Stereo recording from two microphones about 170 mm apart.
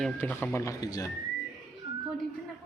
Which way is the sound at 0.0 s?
10° left (ahead or behind).